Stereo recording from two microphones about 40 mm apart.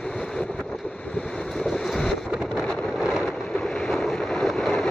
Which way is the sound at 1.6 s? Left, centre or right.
Centre.